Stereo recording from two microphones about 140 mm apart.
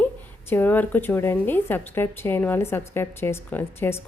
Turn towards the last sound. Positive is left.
turn(degrees=15)  # may be behind; listen again after turning